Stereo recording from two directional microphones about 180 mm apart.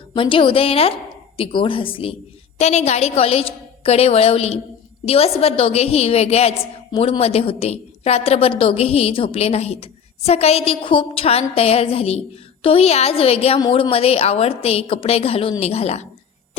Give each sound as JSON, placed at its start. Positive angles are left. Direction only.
{"t": 0.1, "sound": "a woman's voice", "side_deg": 30}